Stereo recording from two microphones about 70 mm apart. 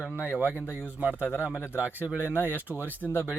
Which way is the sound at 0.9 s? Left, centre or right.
Right.